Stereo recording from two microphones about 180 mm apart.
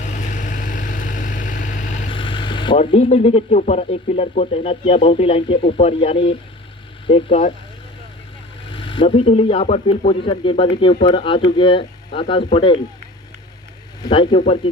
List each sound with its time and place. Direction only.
0.0 s vehicle: 45° left (ahead or behind)
2.1 s speech: 30° left (ahead or behind)
8.7 s speech: 25° left (ahead or behind)
14.0 s speech: 25° left (ahead or behind)